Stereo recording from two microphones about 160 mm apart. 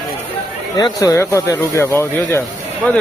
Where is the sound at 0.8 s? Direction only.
25° left (ahead or behind).